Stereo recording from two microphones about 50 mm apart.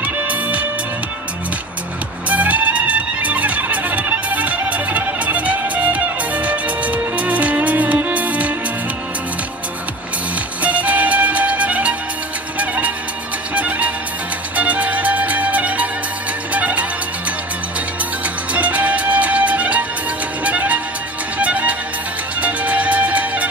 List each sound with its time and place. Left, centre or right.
0.0 s music: right
2.2 s music: right
10.6 s music: right
18.2 s music: right